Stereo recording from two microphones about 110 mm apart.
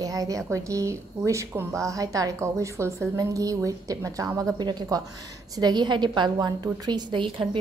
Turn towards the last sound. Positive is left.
turn(degrees=-45)  # may be behind; listen again after turning